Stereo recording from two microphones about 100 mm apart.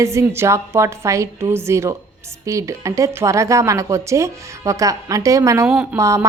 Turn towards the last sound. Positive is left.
turn(degrees=-30)  # may be behind; listen again after turning